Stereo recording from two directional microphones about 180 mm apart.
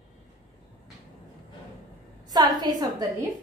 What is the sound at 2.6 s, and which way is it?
Speech, 20° right (ahead or behind).